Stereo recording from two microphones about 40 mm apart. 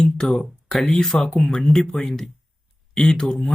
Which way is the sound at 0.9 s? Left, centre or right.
Centre.